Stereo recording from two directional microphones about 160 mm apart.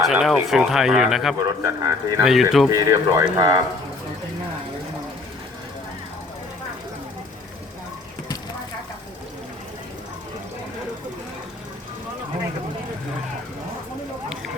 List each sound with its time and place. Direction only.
0.0 s speech: centre (ahead or behind)
1.6 s speech: 20° right (ahead or behind)
2.2 s speech: centre (ahead or behind)
2.6 s speech: 20° right (ahead or behind)